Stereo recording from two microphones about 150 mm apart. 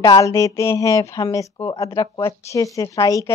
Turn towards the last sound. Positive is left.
turn(degrees=20)  # may be behind; listen again after turning